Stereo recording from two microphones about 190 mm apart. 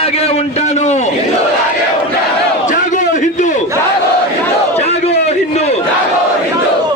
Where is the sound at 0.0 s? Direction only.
30° left (ahead or behind).